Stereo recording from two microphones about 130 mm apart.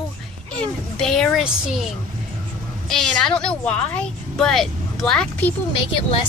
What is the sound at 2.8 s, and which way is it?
A woman's voice, 5° left (ahead or behind).